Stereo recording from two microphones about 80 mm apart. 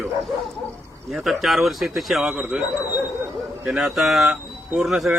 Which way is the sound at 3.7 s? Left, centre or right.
Centre.